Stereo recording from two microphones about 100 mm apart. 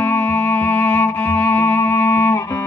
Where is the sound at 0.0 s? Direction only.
25° left (ahead or behind).